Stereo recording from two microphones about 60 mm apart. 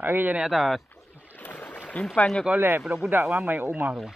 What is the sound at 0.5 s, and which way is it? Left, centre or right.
Speech, centre.